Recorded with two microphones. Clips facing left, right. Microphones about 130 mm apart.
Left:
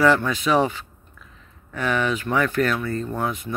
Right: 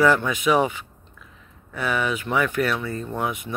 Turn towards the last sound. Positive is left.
turn(degrees=-15)  # may be behind; listen again after turning